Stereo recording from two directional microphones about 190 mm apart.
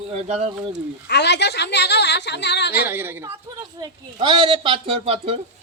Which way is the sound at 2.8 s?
10° right (ahead or behind).